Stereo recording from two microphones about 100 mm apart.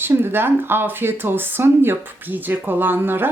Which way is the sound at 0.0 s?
20° right (ahead or behind).